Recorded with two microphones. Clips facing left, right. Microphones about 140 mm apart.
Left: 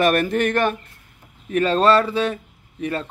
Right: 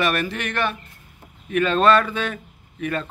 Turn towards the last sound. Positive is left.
turn(degrees=30)  # may be behind; listen again after turning